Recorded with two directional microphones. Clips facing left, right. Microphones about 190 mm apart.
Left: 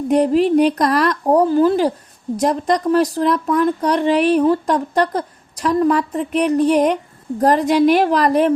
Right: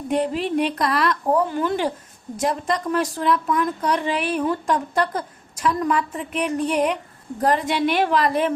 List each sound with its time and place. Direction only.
0.1 s speech: 40° left (ahead or behind)